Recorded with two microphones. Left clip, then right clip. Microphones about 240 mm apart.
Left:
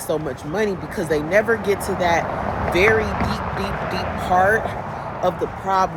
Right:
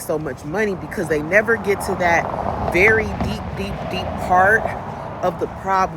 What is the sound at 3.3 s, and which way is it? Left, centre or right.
Vehicle, centre.